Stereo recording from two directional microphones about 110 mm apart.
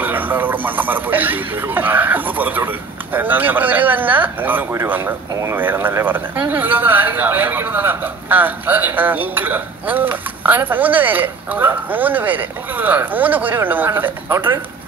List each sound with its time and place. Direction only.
0.0 s speech: 15° right (ahead or behind)